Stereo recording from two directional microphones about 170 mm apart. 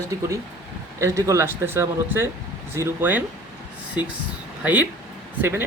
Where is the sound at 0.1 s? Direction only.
20° right (ahead or behind).